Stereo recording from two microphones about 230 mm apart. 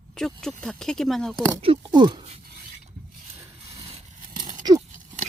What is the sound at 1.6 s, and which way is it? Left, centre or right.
Speech, right.